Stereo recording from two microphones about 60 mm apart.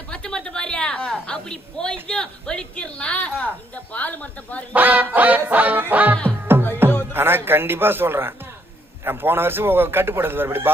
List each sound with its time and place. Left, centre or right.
0.1 s a woman's voice: centre
4.7 s music: right
6.4 s music: right
7.1 s a man's voice: right